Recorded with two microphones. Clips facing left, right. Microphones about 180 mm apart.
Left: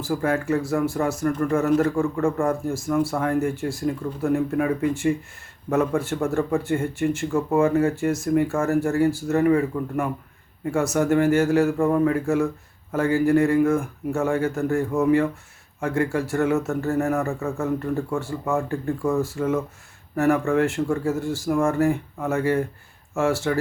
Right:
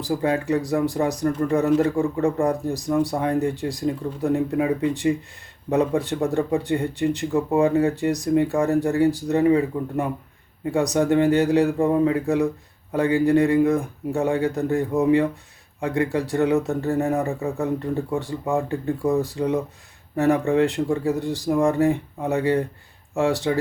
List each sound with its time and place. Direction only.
0.0 s speech: 20° right (ahead or behind)